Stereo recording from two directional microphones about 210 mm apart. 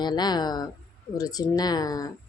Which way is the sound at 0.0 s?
20° left (ahead or behind).